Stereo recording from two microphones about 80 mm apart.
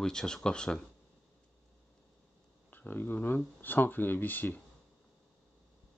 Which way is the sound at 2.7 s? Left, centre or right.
Left.